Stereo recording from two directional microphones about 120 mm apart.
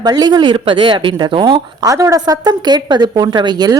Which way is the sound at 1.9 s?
30° right (ahead or behind).